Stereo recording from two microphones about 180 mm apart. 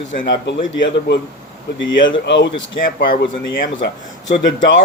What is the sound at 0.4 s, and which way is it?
Speech, 80° left.